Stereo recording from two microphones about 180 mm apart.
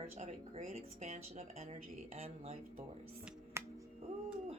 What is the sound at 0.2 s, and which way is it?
Speech, 35° right (ahead or behind).